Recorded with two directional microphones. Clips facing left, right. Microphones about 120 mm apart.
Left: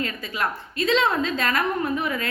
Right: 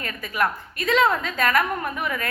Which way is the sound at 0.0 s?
25° left (ahead or behind).